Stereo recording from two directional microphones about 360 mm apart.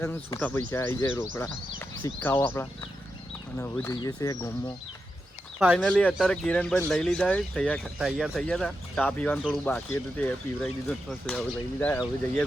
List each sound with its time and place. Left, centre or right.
0.0 s speech: centre
5.5 s speech: centre